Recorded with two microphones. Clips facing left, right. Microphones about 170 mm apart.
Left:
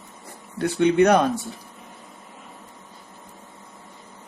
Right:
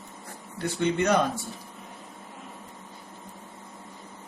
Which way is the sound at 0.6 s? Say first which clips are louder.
Left 8 dB; 65° left (ahead or behind).